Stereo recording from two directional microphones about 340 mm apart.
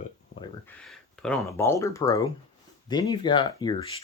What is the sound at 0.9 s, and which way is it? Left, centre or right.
Speech, centre.